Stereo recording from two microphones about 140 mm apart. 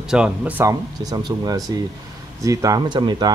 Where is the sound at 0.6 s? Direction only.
25° right (ahead or behind).